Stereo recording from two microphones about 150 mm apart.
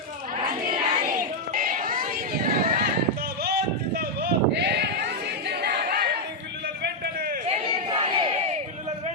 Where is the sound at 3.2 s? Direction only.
90° right.